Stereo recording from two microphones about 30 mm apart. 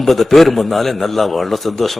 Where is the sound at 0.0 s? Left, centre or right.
Centre.